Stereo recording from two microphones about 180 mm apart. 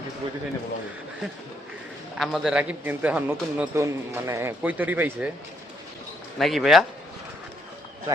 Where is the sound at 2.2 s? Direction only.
Centre (ahead or behind).